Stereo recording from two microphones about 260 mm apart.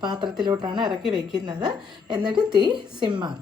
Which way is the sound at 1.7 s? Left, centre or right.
Centre.